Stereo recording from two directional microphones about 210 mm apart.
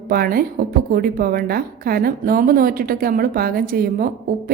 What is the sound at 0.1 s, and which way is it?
A woman's voice, 45° right (ahead or behind).